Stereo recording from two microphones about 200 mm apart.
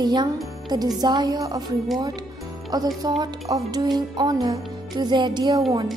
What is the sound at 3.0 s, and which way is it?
A woman's voice, 20° right (ahead or behind).